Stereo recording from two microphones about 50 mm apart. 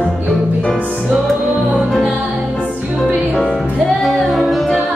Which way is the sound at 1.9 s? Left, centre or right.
Centre.